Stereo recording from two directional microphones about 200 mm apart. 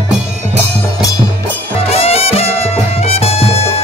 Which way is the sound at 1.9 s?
30° left (ahead or behind).